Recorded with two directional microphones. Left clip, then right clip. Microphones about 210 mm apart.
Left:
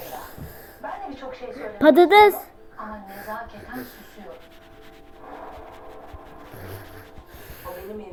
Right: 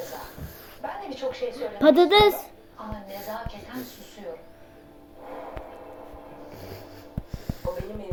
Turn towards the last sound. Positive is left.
turn(degrees=25)  # may be behind; listen again after turning